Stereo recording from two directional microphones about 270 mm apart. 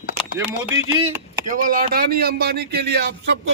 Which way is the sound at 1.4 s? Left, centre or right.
Right.